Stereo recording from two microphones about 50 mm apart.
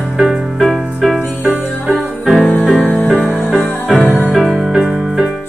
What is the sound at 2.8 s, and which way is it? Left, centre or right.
Music, left.